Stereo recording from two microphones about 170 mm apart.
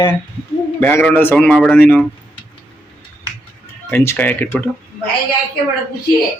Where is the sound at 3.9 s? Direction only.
10° left (ahead or behind).